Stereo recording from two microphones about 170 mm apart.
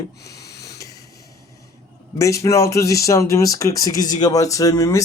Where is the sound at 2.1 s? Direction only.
20° left (ahead or behind).